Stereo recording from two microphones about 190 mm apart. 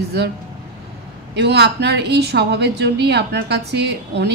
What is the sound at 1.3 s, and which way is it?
A woman's voice, 60° right (ahead or behind).